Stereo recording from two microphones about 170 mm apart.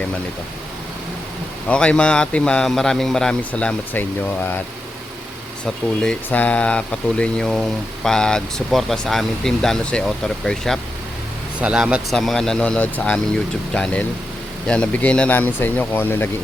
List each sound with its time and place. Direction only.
1.6 s speech: 5° left (ahead or behind)
6.0 s speech: 5° left (ahead or behind)